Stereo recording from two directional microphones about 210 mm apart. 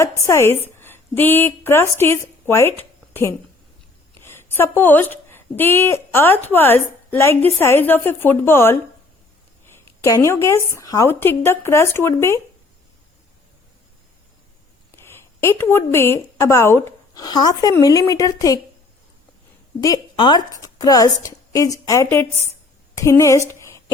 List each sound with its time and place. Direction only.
0.3 s a woman's voice: 10° left (ahead or behind)
9.8 s a sound: 15° left (ahead or behind)
10.2 s a woman's voice: 15° left (ahead or behind)
14.9 s a woman's voice: 10° left (ahead or behind)
19.8 s a woman's voice: 20° left (ahead or behind)